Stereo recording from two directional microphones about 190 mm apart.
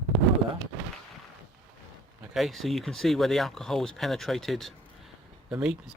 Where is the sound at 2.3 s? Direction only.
Centre (ahead or behind).